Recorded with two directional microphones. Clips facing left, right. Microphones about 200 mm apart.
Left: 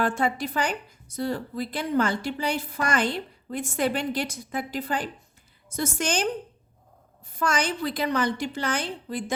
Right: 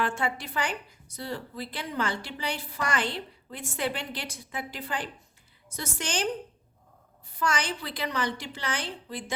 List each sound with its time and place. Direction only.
0.0 s a woman's voice: 40° left (ahead or behind)
7.3 s a woman's voice: 45° left (ahead or behind)